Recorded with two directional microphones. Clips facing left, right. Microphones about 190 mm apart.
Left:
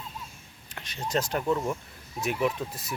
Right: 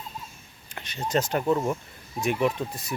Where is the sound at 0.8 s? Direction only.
Centre (ahead or behind).